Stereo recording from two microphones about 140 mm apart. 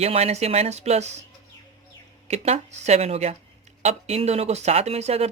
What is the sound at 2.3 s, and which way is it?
A woman's voice, 50° right (ahead or behind).